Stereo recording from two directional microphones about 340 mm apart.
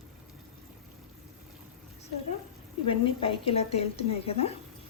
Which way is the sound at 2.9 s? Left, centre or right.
Centre.